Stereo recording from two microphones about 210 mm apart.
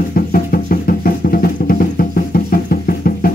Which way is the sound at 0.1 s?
45° left (ahead or behind).